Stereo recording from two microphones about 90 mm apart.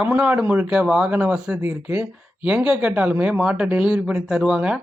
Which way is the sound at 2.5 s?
10° right (ahead or behind).